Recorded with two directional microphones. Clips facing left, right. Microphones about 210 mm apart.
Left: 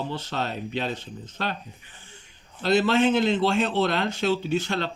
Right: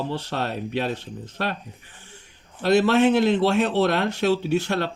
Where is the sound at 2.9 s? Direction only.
65° right (ahead or behind).